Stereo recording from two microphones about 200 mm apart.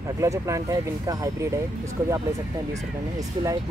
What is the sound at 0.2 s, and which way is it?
Speech, 15° right (ahead or behind).